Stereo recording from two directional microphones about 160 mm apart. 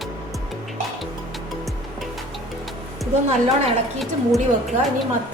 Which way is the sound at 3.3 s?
40° right (ahead or behind).